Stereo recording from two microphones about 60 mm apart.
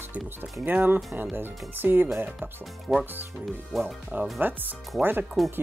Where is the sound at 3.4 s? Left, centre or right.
Centre.